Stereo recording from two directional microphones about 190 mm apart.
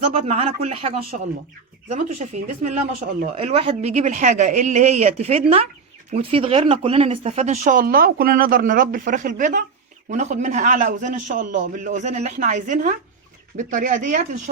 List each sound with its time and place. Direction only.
0.1 s a man's voice: 30° right (ahead or behind)